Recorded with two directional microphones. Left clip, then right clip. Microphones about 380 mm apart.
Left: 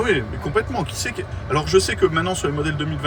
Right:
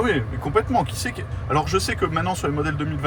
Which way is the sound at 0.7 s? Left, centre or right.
Centre.